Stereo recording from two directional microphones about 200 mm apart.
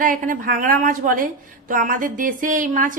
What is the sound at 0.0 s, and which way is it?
A woman's voice, 45° right (ahead or behind).